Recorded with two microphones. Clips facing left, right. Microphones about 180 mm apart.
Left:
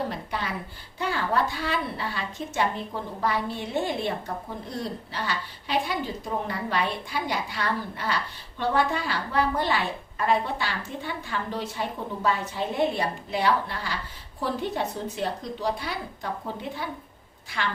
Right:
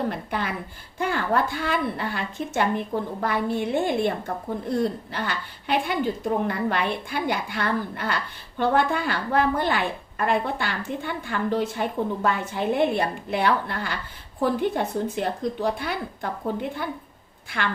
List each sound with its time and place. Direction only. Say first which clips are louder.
0.1 s a woman's voice: right 3 dB; 55° right (ahead or behind)